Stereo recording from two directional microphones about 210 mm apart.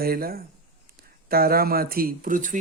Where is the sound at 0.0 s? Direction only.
45° right (ahead or behind).